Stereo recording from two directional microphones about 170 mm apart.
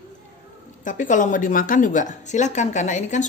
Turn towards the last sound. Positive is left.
turn(degrees=45)  # may be behind; listen again after turning